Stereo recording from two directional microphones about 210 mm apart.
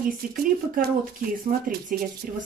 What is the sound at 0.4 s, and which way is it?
Speech, 45° right (ahead or behind).